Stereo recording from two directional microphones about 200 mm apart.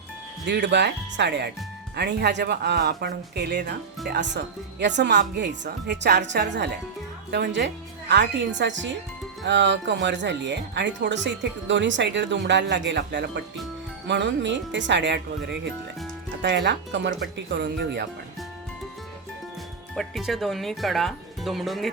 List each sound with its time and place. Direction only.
0.4 s a woman's voice: 60° right (ahead or behind)
16.4 s a woman's voice: 60° right (ahead or behind)
20.0 s speech: centre (ahead or behind)